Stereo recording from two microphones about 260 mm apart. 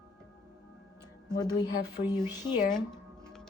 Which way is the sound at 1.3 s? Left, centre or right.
Centre.